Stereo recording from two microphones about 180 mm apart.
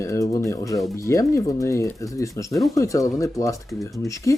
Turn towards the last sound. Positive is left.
turn(degrees=15)  # may be behind; listen again after turning